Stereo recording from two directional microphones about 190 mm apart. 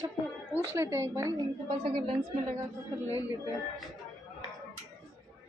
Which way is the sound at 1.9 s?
25° right (ahead or behind).